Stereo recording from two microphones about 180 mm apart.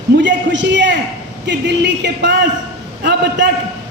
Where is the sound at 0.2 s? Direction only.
85° right.